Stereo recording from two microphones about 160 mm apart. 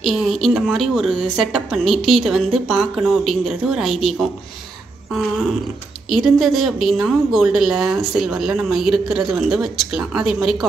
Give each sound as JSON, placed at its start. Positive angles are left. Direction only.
{"t": 0.0, "sound": "a woman's voice", "side_deg": 0}
{"t": 6.0, "sound": "a woman's voice", "side_deg": 0}